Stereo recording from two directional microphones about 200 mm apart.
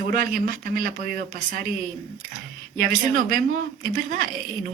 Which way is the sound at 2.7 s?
45° right (ahead or behind).